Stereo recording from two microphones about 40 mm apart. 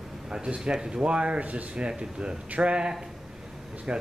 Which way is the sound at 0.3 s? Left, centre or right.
Centre.